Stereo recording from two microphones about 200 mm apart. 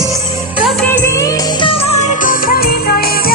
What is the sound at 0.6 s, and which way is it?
Music, 5° left (ahead or behind).